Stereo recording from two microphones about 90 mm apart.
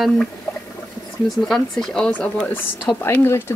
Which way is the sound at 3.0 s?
25° left (ahead or behind).